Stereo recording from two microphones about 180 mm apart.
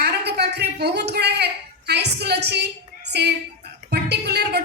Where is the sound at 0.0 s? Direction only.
65° right (ahead or behind).